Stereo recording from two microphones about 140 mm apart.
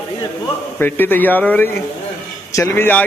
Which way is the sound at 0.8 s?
15° left (ahead or behind).